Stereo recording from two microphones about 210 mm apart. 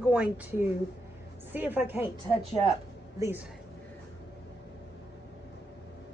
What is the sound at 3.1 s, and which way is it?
Speech, 10° right (ahead or behind).